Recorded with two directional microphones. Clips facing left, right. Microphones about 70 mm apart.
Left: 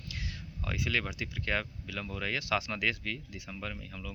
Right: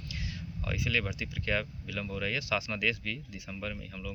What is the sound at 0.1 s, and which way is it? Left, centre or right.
Speech, left.